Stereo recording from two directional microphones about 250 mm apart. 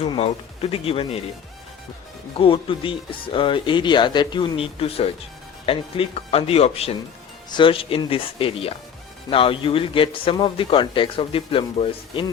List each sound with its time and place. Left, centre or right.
0.0 s speech: left
2.4 s speech: left